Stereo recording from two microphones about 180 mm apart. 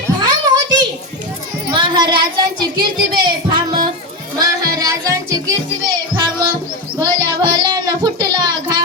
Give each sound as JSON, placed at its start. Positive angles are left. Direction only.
{"t": 0.2, "sound": "a sound", "side_deg": -20}
{"t": 1.7, "sound": "child singing", "side_deg": -25}
{"t": 4.4, "sound": "music", "side_deg": -20}
{"t": 6.9, "sound": "child singing", "side_deg": -20}